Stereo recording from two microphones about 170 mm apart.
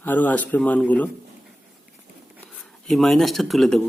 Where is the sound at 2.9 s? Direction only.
Centre (ahead or behind).